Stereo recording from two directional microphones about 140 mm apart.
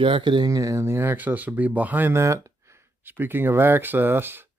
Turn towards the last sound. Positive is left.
turn(degrees=-15)  # may be behind; listen again after turning